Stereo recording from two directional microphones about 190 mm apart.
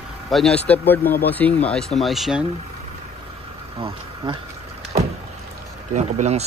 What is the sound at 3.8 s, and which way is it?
Speech, 30° right (ahead or behind).